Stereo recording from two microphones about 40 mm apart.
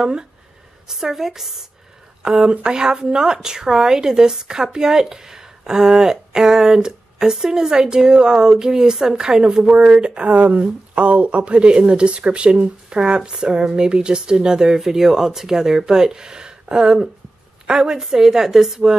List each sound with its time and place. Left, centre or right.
0.0 s a woman's voice: centre
2.2 s a woman's voice: right
10.0 s a woman's voice: right; by 18.9 s centre